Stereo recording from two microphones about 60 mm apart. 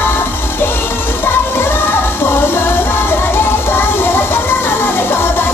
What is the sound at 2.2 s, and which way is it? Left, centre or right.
Music, left.